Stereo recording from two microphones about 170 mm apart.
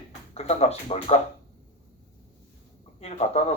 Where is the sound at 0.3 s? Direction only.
40° left (ahead or behind).